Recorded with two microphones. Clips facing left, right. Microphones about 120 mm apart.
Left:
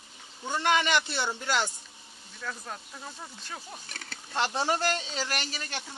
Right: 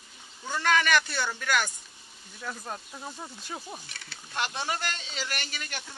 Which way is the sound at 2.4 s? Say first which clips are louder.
Right 1 dB; 15° right (ahead or behind).